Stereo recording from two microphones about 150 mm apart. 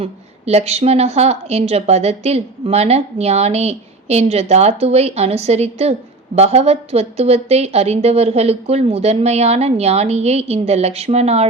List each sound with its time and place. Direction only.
0.0 s a woman's voice: 45° right (ahead or behind)